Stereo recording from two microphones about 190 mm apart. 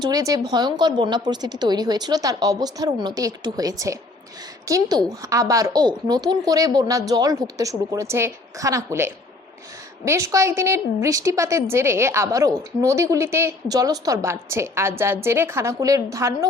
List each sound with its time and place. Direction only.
0.0 s a woman's voice: 20° right (ahead or behind)